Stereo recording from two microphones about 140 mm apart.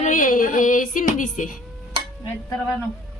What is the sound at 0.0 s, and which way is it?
Music, 65° left (ahead or behind).